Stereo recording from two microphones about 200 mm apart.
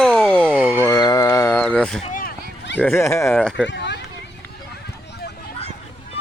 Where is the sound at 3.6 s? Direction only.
60° left (ahead or behind).